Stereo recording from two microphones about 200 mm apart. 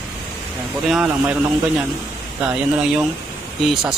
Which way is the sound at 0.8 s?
Centre (ahead or behind).